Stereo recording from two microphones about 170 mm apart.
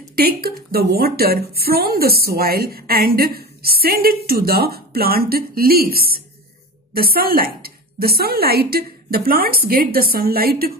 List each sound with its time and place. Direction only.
0.2 s a woman's voice: 65° right (ahead or behind)